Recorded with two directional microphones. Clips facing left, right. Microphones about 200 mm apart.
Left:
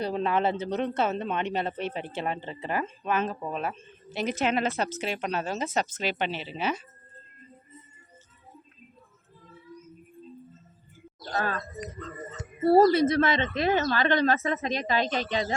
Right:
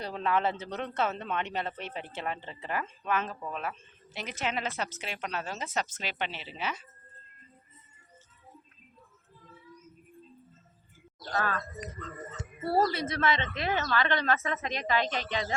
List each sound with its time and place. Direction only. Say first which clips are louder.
0.0 s speech: left 4 dB; 25° left (ahead or behind)
4.1 s a woman's voice: left 8 dB; 40° left (ahead or behind)
4.9 s a woman's voice: left 6 dB; 35° left (ahead or behind)
11.3 s a woman's voice: left 2 dB; 30° left (ahead or behind)
12.7 s a woman's voice: left 9 dB; 40° left (ahead or behind)